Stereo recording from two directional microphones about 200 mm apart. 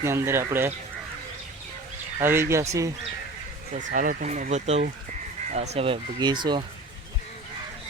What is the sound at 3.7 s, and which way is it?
Speech, 40° right (ahead or behind).